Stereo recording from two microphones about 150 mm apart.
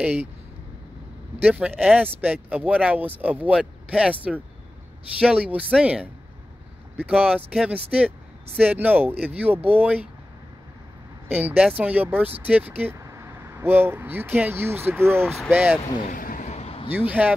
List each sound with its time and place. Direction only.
0.0 s speech: 10° right (ahead or behind)
1.4 s speech: 10° right (ahead or behind)
11.2 s speech: 10° right (ahead or behind)
16.1 s a sound: 65° left (ahead or behind)
16.4 s a sound: 45° left (ahead or behind)
16.9 s speech: 10° right (ahead or behind)